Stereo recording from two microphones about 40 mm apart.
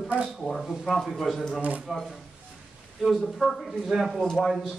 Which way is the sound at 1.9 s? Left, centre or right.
Centre.